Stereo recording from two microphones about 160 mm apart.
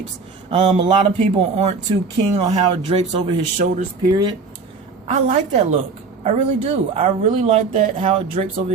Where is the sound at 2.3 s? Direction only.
45° right (ahead or behind).